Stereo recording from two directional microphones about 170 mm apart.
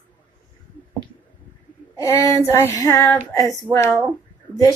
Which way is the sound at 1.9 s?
15° left (ahead or behind).